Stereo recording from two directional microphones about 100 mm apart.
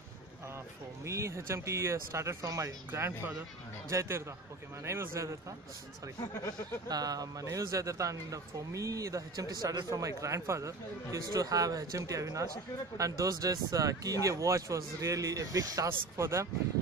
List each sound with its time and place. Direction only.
1.0 s speech: 30° right (ahead or behind)
6.9 s speech: 40° right (ahead or behind)